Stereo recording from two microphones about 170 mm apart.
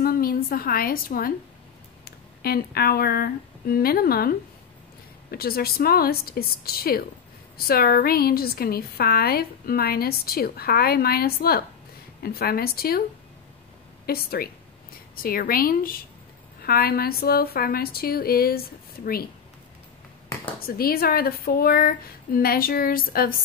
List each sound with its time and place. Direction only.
0.0 s a woman's voice: 60° left (ahead or behind)
14.0 s a woman's voice: 65° left (ahead or behind)
20.6 s a woman's voice: 60° left (ahead or behind)